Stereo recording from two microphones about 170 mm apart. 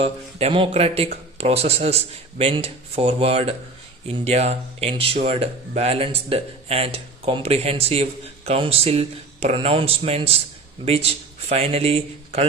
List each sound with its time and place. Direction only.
0.0 s speech: 35° right (ahead or behind)